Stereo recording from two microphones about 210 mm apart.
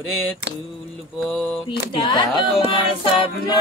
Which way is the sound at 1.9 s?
20° left (ahead or behind).